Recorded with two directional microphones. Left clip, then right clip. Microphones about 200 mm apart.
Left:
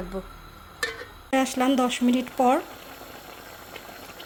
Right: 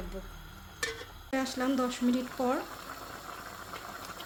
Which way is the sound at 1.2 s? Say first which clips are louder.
Left 9 dB; 30° left (ahead or behind).